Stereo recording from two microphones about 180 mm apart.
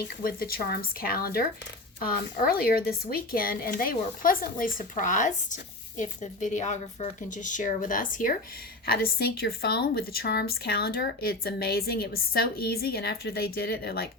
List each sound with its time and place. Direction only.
0.2 s a woman's voice: 55° left (ahead or behind)